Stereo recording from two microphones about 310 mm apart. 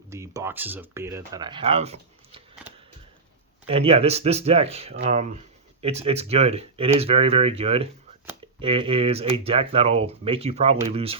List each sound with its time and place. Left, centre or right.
0.1 s speech: centre
3.7 s speech: centre